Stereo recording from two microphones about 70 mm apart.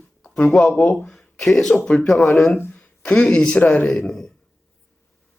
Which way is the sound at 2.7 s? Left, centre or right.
Centre.